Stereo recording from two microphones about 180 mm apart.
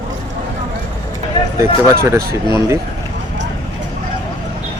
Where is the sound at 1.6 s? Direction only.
15° right (ahead or behind).